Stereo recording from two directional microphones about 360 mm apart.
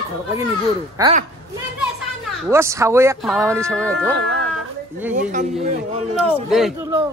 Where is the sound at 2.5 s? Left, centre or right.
Centre.